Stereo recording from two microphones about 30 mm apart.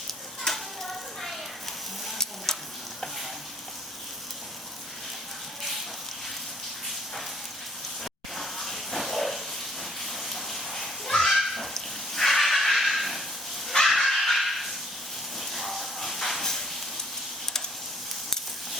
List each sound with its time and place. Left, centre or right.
0.1 s stir: centre
2.5 s stir: centre
8.4 s hiss: centre
10.1 s a sound: centre
13.8 s dog: centre
15.4 s a sound: centre